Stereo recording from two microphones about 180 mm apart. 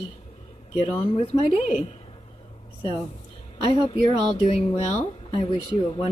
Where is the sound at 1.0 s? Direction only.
30° left (ahead or behind).